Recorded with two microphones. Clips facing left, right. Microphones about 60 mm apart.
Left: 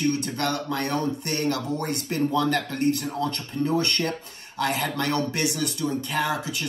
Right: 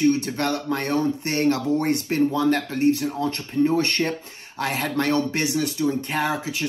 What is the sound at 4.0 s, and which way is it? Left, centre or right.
Speech, centre.